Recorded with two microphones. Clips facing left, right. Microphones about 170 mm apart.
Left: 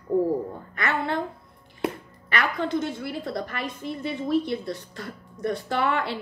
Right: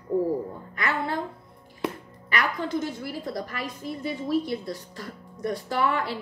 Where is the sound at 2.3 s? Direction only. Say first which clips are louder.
Left 2 dB; 60° left (ahead or behind).